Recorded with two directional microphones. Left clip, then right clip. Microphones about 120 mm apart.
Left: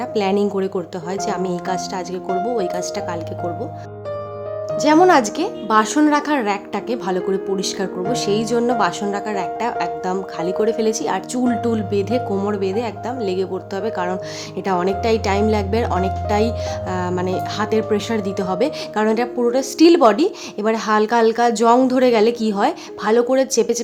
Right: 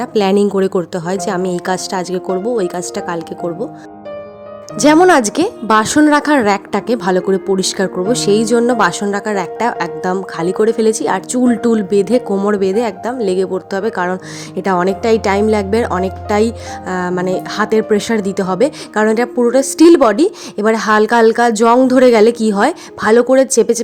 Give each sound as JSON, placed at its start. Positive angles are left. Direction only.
{"t": 0.0, "sound": "a woman's voice", "side_deg": -50}
{"t": 2.5, "sound": "a woman's voice", "side_deg": -40}
{"t": 5.0, "sound": "a woman's voice", "side_deg": -60}